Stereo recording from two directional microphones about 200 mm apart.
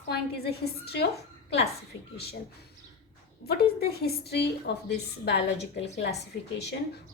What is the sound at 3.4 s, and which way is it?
A woman's voice, 50° left (ahead or behind).